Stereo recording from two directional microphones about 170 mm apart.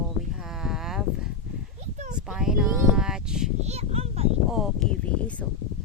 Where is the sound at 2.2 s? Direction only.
5° right (ahead or behind).